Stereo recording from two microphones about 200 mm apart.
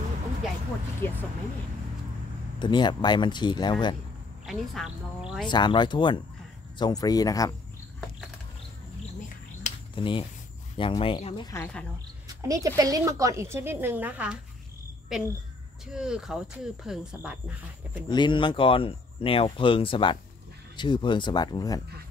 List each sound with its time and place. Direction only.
1.0 s speech: 10° left (ahead or behind)
2.6 s speech: 25° left (ahead or behind)
4.5 s speech: centre (ahead or behind)
5.5 s speech: 25° left (ahead or behind)
9.6 s finger snapping: 25° left (ahead or behind)
10.8 s speech: 25° left (ahead or behind)
11.5 s speech: 10° left (ahead or behind)
12.3 s a woman's voice: 15° right (ahead or behind)
18.0 s speech: 20° left (ahead or behind)